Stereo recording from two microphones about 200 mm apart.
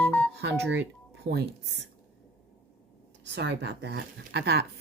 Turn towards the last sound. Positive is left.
turn(degrees=-55)  # may be behind; listen again after turning